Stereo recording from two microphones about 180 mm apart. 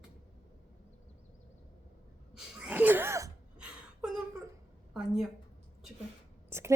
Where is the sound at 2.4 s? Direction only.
5° right (ahead or behind).